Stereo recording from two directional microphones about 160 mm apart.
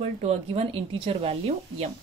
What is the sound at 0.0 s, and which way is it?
Speech, 40° right (ahead or behind).